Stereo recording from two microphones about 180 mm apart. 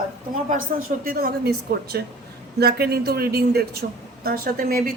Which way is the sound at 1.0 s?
55° right (ahead or behind).